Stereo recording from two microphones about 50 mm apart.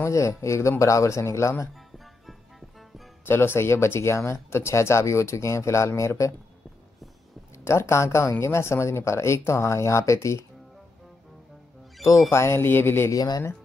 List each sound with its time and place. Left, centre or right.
0.0 s a man's voice: left
3.3 s speech: left
7.5 s speech: left
12.3 s speech: left